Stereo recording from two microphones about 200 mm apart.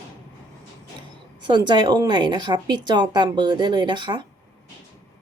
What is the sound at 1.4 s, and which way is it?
A woman's voice, 20° right (ahead or behind).